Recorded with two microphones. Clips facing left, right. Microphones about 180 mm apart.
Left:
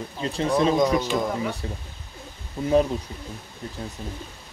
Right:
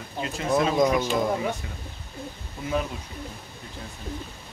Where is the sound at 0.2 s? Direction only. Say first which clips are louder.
Left 4 dB; 30° left (ahead or behind).